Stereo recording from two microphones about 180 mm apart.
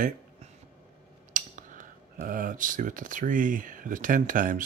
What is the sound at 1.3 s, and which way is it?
Speech, 45° right (ahead or behind).